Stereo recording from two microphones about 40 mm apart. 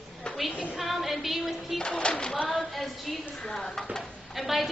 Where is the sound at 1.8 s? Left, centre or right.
Left.